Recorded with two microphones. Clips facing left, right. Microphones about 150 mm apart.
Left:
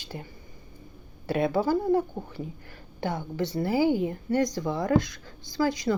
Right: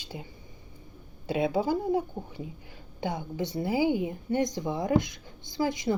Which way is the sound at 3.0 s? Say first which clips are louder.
Left 2 dB; 15° right (ahead or behind).